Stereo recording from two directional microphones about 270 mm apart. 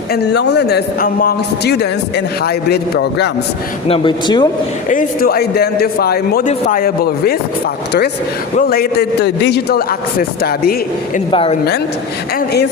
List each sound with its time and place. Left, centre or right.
0.1 s a man's voice: left
3.8 s speech: centre
4.9 s a man's voice: left
8.5 s a man's voice: left
11.3 s a woman's voice: centre